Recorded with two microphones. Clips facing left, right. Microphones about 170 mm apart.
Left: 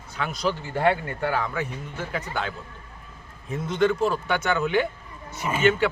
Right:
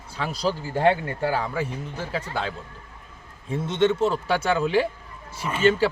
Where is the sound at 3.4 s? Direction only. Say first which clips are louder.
Right 1 dB; 30° right (ahead or behind).